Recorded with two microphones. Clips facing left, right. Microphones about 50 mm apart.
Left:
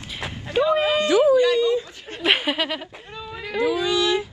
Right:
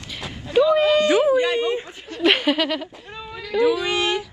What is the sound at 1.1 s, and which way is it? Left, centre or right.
Speech, right.